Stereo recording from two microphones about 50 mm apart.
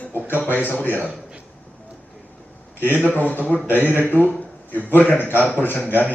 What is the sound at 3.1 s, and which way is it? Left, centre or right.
Speech, left.